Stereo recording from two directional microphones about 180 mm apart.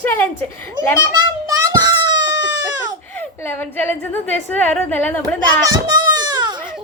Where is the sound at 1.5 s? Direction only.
25° right (ahead or behind).